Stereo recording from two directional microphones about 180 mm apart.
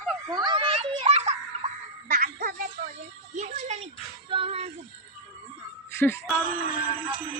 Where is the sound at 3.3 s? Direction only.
40° right (ahead or behind).